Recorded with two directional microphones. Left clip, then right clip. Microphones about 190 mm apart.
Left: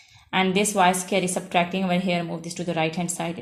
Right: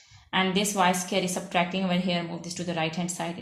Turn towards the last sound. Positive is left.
turn(degrees=45)  # may be behind; listen again after turning